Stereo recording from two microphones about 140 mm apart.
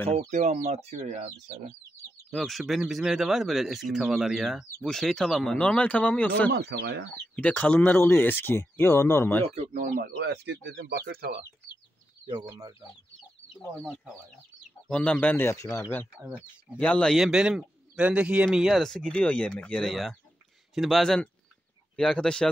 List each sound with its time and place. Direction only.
0.3 s speech: 60° right (ahead or behind)
2.3 s speech: centre (ahead or behind); by 9.5 s 15° left (ahead or behind)
9.6 s speech: 65° right (ahead or behind)
10.7 s speech: 90° right
12.4 s speech: 25° right (ahead or behind)
13.7 s speech: centre (ahead or behind)